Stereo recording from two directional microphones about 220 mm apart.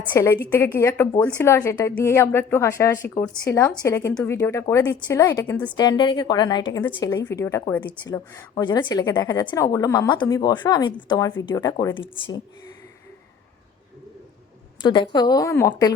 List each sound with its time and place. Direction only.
0.1 s a woman's voice: 10° left (ahead or behind)
14.8 s a woman's voice: 20° left (ahead or behind)